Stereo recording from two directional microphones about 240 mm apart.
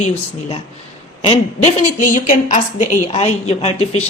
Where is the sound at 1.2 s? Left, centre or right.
Left.